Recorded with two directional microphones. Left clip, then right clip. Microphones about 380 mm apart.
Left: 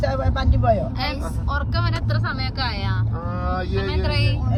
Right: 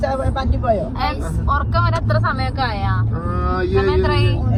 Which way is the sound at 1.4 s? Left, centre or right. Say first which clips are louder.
Right 8 dB; centre.